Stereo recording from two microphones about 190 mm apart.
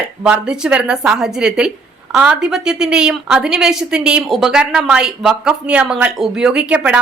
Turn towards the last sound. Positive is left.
turn(degrees=-5)  # may be behind; listen again after turning